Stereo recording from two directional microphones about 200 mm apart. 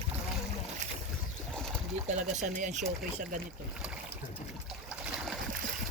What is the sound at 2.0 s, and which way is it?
Speech, 35° right (ahead or behind).